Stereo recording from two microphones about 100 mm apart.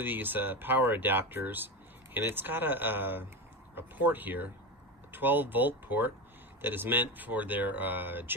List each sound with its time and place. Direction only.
0.0 s speech: 20° right (ahead or behind)